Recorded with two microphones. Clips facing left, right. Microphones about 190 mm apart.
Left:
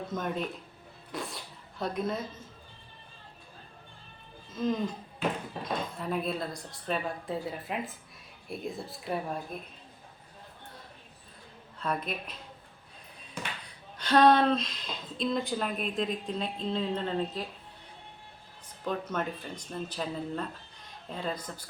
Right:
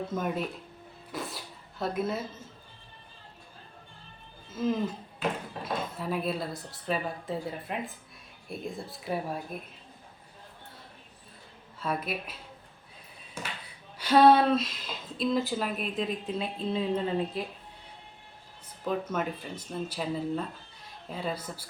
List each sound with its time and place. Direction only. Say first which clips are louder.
0.1 s a woman's voice: even; 10° right (ahead or behind)
1.1 s a sound: right 1 dB; centre (ahead or behind)
1.8 s speech: right 1 dB; 5° right (ahead or behind)
4.4 s speech: right 1 dB; 5° right (ahead or behind)
11.8 s speech: right 1 dB; 5° right (ahead or behind)
14.0 s a woman's voice: right 2 dB; 10° right (ahead or behind)
18.9 s a woman's voice: right 2 dB; 5° right (ahead or behind)